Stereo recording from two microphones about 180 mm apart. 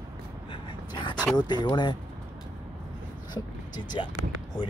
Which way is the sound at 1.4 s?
25° left (ahead or behind).